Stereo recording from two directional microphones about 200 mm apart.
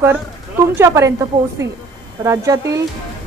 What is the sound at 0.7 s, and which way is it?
Speech, 15° right (ahead or behind).